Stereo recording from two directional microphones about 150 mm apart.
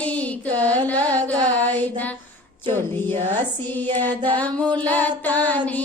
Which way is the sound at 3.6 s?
10° left (ahead or behind).